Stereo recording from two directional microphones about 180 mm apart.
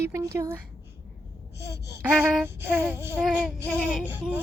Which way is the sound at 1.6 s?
65° left (ahead or behind).